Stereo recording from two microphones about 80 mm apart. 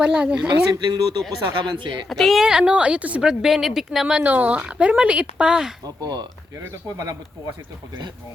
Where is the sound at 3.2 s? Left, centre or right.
Centre.